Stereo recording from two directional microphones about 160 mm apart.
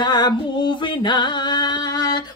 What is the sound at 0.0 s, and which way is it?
Music, 25° left (ahead or behind).